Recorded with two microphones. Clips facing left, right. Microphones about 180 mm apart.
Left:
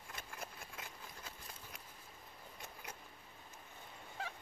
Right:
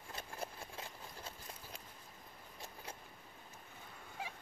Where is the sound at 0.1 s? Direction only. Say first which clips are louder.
Right 4 dB; 30° right (ahead or behind).